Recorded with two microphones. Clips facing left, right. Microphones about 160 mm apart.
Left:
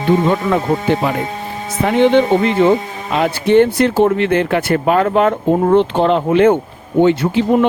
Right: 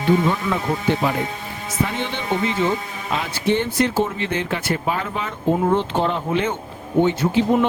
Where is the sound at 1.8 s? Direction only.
60° left (ahead or behind).